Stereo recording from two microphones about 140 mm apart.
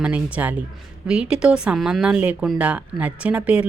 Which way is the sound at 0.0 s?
10° right (ahead or behind).